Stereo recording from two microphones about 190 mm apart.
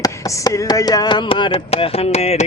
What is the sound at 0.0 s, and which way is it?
Speech, 20° left (ahead or behind).